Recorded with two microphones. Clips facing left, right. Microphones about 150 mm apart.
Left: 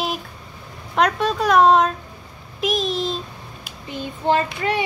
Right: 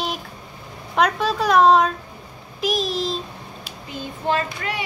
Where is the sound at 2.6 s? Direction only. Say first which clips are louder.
Left 1 dB; centre (ahead or behind).